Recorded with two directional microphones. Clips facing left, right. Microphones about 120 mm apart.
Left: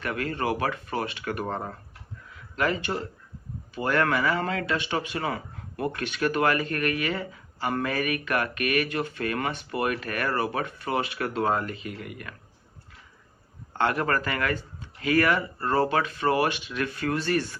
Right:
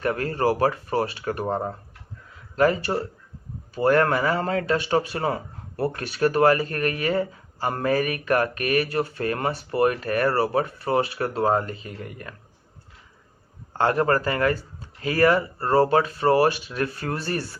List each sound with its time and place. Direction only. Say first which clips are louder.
0.0 s speech: right 6 dB; 40° right (ahead or behind)
13.7 s speech: right 4 dB; 35° right (ahead or behind)